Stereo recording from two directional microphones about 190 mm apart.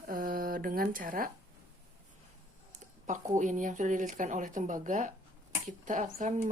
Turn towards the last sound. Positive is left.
turn(degrees=-40)  # may be behind; listen again after turning